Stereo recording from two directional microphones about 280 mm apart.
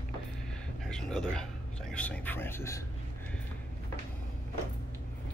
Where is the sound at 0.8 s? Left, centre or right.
Centre.